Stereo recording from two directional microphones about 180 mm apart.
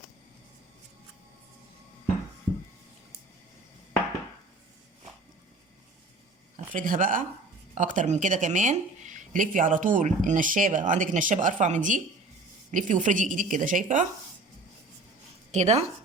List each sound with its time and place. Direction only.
6.7 s speech: 50° right (ahead or behind)
15.5 s speech: 40° right (ahead or behind)